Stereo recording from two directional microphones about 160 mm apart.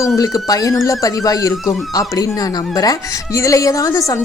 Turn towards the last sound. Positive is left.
turn(degrees=20)  # may be behind; listen again after turning